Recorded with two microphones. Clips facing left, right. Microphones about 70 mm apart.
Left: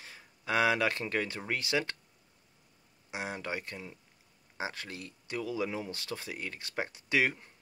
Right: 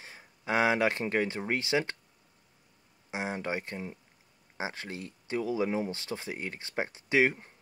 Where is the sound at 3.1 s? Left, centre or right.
Right.